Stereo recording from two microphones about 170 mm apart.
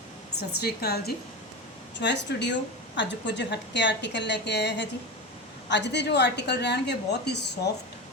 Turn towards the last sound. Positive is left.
turn(degrees=75)  # may be behind; listen again after turning